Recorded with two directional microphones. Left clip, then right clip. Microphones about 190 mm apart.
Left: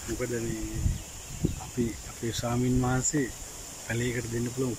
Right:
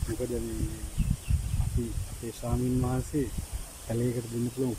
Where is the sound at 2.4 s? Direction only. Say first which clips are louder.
Left 2 dB; 5° left (ahead or behind).